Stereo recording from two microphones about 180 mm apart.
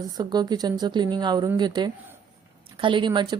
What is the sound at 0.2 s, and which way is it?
Speech, 25° right (ahead or behind).